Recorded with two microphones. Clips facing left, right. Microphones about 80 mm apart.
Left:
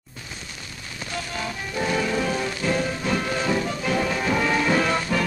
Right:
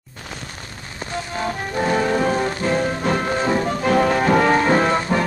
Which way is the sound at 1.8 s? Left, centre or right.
Right.